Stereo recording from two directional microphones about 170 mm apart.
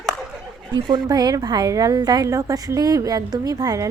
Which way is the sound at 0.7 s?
25° right (ahead or behind).